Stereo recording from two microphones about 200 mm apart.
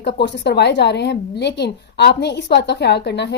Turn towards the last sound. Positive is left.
turn(degrees=55)  # may be behind; listen again after turning